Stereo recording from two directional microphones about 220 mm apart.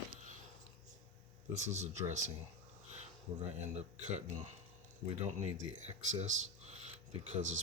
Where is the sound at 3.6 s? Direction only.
30° right (ahead or behind).